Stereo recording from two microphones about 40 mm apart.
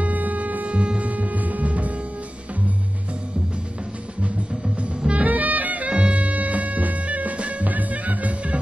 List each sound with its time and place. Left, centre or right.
0.0 s hum: right
4.7 s music: right
5.3 s music: right
5.9 s music: right